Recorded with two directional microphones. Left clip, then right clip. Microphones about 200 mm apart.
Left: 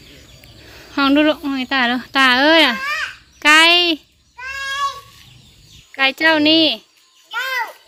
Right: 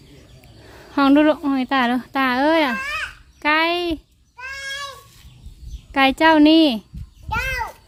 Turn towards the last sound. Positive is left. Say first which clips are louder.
# left 3 dB
turn(degrees=-30)  # may be behind; listen again after turning